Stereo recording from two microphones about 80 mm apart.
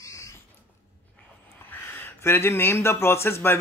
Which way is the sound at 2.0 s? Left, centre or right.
Left.